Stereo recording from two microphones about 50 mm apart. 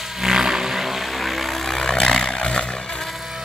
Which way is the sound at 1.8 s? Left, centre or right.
Centre.